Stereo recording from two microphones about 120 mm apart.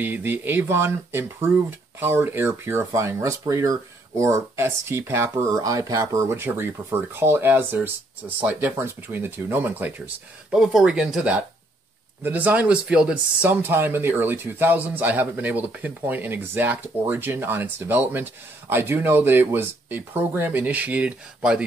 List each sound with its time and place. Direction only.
0.0 s speech: 15° right (ahead or behind)
10.6 s speech: 5° right (ahead or behind)